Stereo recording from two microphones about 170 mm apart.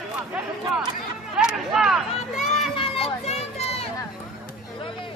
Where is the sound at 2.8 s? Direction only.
35° left (ahead or behind).